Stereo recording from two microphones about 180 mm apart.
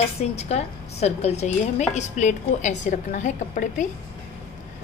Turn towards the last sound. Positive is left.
turn(degrees=45)  # may be behind; listen again after turning